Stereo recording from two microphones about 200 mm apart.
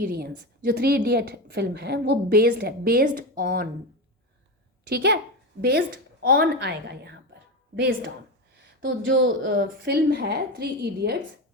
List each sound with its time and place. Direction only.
0.0 s a woman's voice: 50° right (ahead or behind)
4.9 s a woman's voice: 55° right (ahead or behind)
6.2 s a woman's voice: 50° right (ahead or behind)